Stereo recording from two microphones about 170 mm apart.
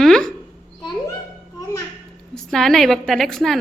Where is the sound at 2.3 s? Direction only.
Centre (ahead or behind).